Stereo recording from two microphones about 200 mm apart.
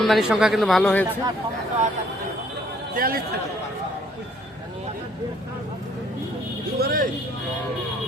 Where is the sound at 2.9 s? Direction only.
45° right (ahead or behind).